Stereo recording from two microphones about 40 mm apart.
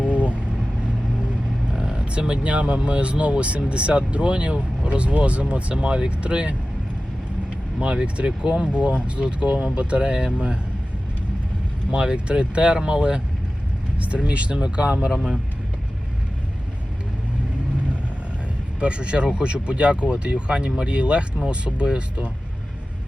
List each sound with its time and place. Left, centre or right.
0.0 s vehicle: right
1.7 s speech: right
7.8 s speech: right
11.9 s speech: right
15.1 s speech: centre
18.8 s speech: right